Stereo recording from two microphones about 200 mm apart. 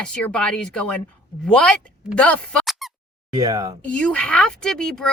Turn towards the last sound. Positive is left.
turn(degrees=5)  # may be behind; listen again after turning